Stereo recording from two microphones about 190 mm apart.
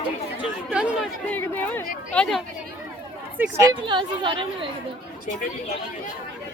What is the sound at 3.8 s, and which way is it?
Speech, 25° right (ahead or behind).